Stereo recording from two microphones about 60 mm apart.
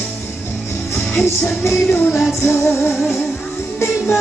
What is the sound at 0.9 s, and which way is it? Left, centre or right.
Music, left.